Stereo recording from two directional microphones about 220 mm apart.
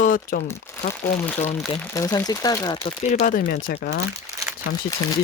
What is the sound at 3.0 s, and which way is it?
Speech, 35° left (ahead or behind).